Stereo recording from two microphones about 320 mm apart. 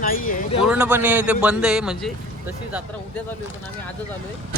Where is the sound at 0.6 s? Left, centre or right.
Centre.